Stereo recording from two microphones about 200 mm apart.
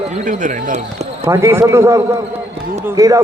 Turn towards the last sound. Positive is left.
turn(degrees=-15)  # may be behind; listen again after turning